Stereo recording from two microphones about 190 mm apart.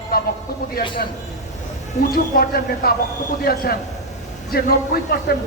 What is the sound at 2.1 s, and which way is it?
A man's voice, 50° left (ahead or behind).